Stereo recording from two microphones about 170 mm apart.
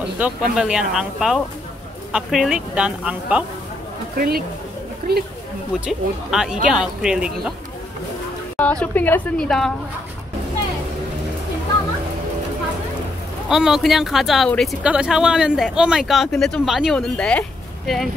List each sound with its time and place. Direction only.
0.2 s speech: 5° right (ahead or behind)
5.0 s speech: 60° right (ahead or behind)
5.9 s speech: centre (ahead or behind)
8.5 s a woman's voice: 10° left (ahead or behind)
13.5 s speech: 5° right (ahead or behind)